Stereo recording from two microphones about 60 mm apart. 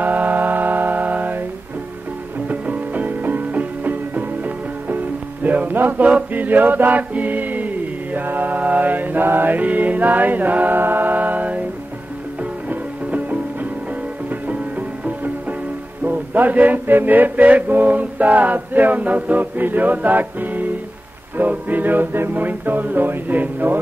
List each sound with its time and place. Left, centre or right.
0.0 s music: right
2.4 s music: right
12.6 s music: right